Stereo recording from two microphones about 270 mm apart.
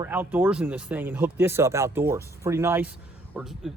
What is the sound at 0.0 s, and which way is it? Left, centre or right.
Speech, centre.